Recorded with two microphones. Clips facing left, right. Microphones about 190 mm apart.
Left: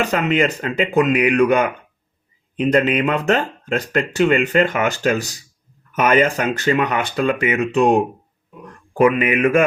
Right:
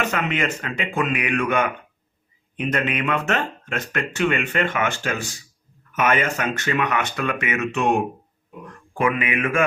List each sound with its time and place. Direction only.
0.0 s speech: 35° left (ahead or behind)